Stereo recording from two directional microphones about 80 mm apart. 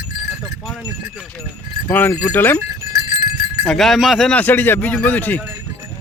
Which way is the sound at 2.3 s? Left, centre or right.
Left.